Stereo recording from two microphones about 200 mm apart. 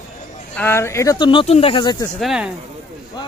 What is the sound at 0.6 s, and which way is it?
Speech, 10° left (ahead or behind).